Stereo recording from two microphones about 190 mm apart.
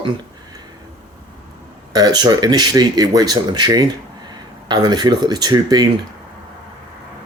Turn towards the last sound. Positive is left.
turn(degrees=-20)  # may be behind; listen again after turning